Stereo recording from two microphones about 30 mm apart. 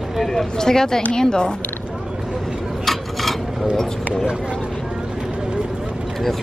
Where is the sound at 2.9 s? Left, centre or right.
Centre.